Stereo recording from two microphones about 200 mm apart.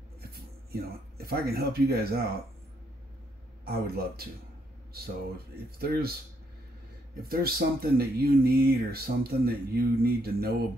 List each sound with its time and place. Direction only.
0.2 s speech: 50° right (ahead or behind)
3.6 s speech: 50° right (ahead or behind)
5.8 s speech: 50° right (ahead or behind)
7.2 s speech: 50° right (ahead or behind)